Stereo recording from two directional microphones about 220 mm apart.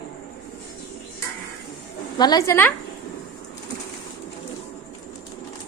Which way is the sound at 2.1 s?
20° left (ahead or behind).